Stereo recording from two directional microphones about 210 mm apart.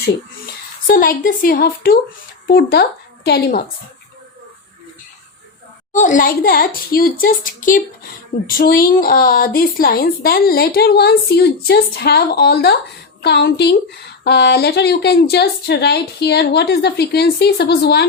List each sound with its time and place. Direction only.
0.9 s a woman's voice: 40° left (ahead or behind)
5.9 s a woman's voice: 35° left (ahead or behind); by 18.0 s 50° left (ahead or behind)